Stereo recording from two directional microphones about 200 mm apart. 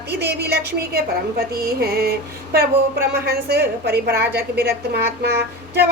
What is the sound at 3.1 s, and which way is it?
A woman's voice, 55° right (ahead or behind).